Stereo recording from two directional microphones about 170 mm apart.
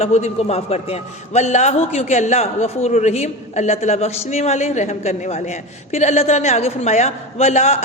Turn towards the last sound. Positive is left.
turn(degrees=40)  # may be behind; listen again after turning